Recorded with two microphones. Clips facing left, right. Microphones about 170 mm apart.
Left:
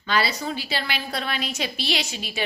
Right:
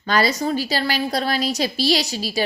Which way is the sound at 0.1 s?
45° right (ahead or behind).